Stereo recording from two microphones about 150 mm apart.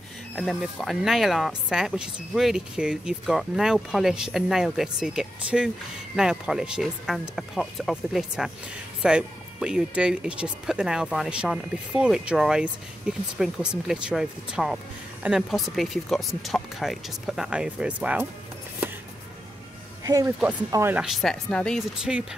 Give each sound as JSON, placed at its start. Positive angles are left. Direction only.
{"t": 0.4, "sound": "speech", "side_deg": 0}
{"t": 20.1, "sound": "speech", "side_deg": -20}
{"t": 21.0, "sound": "speech", "side_deg": 0}